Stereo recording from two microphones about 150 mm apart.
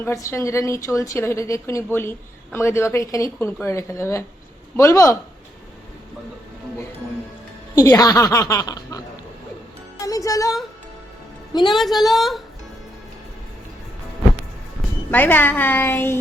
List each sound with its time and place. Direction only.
0.0 s a woman's voice: 20° left (ahead or behind)
7.8 s a woman's voice: 25° left (ahead or behind)
10.0 s music: 20° left (ahead or behind)
11.7 s a woman's voice: centre (ahead or behind)
15.1 s a woman's voice: 10° left (ahead or behind)